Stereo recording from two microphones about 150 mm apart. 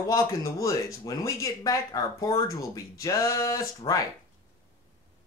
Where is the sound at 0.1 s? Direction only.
20° left (ahead or behind).